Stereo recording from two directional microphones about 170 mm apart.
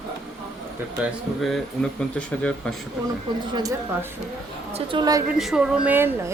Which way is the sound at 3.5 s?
20° right (ahead or behind).